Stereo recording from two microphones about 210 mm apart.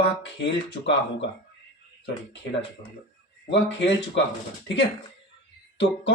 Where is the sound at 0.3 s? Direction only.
55° left (ahead or behind).